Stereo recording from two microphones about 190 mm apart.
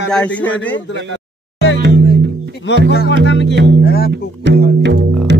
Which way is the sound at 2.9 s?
55° left (ahead or behind).